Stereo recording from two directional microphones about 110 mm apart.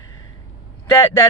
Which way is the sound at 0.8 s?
20° left (ahead or behind).